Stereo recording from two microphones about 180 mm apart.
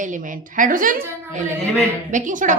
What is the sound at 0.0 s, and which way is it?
A woman's voice, 45° right (ahead or behind).